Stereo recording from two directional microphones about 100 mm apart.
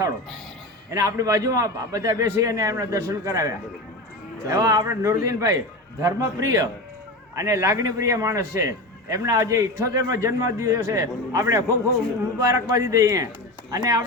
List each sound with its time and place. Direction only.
0.9 s a man's voice: 35° right (ahead or behind)